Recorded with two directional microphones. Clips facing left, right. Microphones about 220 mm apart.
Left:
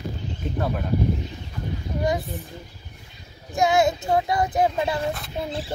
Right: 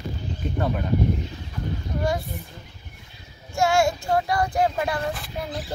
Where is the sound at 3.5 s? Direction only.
20° left (ahead or behind).